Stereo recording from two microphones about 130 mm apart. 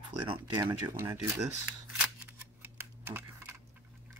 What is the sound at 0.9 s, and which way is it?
Speech, 20° right (ahead or behind).